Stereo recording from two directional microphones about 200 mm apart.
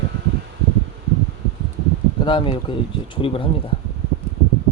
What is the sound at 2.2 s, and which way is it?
Speech, 25° left (ahead or behind).